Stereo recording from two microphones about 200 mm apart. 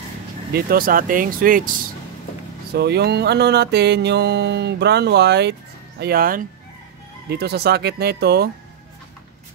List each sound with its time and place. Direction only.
0.5 s speech: 50° right (ahead or behind)
2.7 s music: 55° right (ahead or behind)
7.2 s speech: 50° right (ahead or behind)